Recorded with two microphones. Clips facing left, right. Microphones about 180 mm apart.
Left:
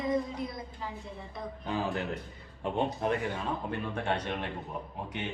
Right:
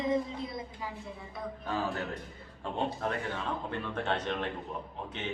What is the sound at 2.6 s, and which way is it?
A man's voice, 15° left (ahead or behind).